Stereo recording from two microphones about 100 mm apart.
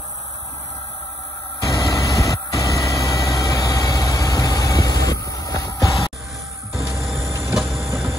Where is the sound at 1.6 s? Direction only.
35° left (ahead or behind).